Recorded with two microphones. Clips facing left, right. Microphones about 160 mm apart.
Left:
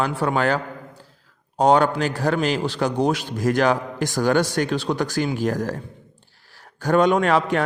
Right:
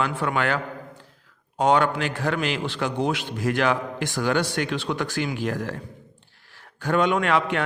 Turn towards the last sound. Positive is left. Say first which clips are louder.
# left 3 dB
turn(degrees=40)  # may be behind; listen again after turning